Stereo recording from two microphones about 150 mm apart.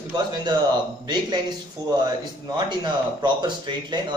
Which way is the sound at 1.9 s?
25° right (ahead or behind).